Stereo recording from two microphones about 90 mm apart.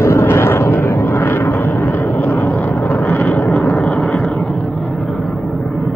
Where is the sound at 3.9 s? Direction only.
Centre (ahead or behind).